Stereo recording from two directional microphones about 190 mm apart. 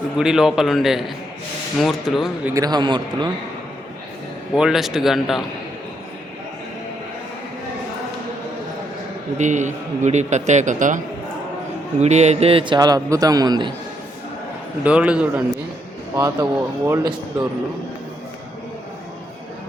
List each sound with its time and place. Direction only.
0.2 s a man's voice: 5° right (ahead or behind)
2.5 s a man's voice: 20° right (ahead or behind)
4.5 s a man's voice: centre (ahead or behind)
9.4 s a man's voice: 40° right (ahead or behind); by 13.7 s 25° right (ahead or behind)
14.8 s speech: 5° right (ahead or behind)